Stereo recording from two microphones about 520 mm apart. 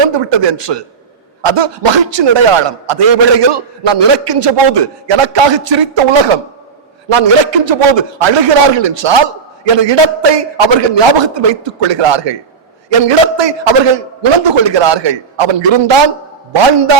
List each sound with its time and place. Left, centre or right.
0.0 s a man's voice: right